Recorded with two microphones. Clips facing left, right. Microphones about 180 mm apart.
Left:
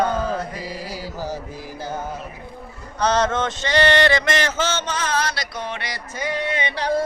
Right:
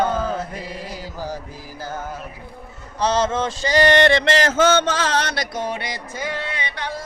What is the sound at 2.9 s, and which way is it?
Speech, 30° right (ahead or behind).